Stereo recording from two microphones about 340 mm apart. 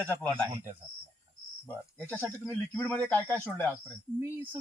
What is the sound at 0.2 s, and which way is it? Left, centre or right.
Speech, centre.